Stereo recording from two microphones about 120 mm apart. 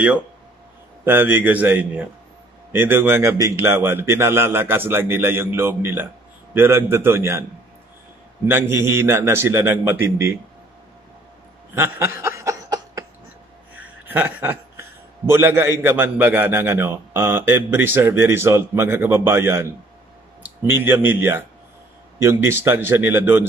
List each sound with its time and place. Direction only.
1.0 s a man's voice: 15° right (ahead or behind)
8.5 s a man's voice: 20° right (ahead or behind)
11.7 s a sound: 20° right (ahead or behind)
14.0 s a man's voice: 15° right (ahead or behind)